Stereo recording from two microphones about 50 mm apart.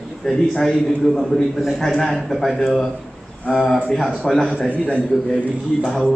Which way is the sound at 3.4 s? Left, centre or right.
Centre.